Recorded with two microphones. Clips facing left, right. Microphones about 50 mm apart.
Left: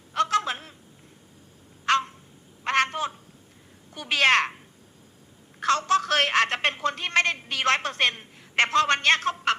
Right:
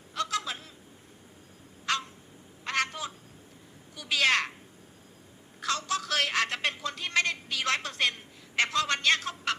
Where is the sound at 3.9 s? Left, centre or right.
Left.